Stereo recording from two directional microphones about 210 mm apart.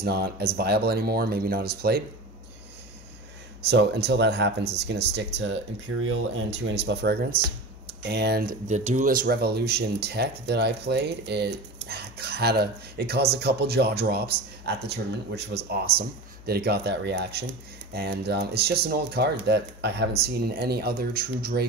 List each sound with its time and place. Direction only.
0.0 s speech: 50° right (ahead or behind)
3.6 s speech: 55° right (ahead or behind)
8.6 s speech: 35° right (ahead or behind)